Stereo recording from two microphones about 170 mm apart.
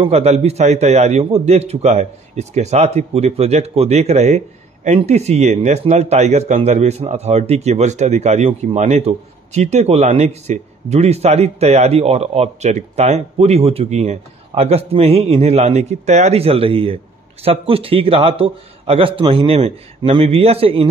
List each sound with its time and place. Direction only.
0.0 s speech: 40° right (ahead or behind)